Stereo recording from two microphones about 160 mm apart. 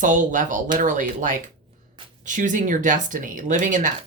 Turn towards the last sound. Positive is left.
turn(degrees=-50)  # may be behind; listen again after turning